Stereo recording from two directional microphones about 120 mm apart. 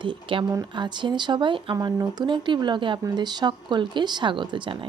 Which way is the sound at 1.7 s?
30° right (ahead or behind).